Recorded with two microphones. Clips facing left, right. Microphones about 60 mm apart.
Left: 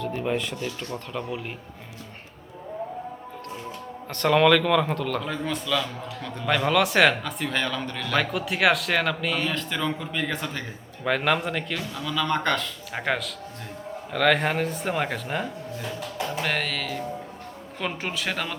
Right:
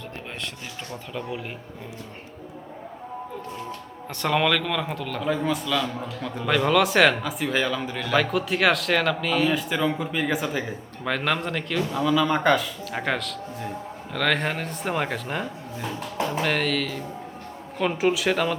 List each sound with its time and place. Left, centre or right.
4.1 s a man's voice: centre
11.0 s a man's voice: centre
11.8 s speech: centre
12.0 s a man's voice: centre